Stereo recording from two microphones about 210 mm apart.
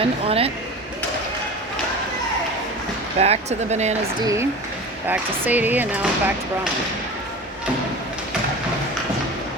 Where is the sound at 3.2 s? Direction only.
30° right (ahead or behind).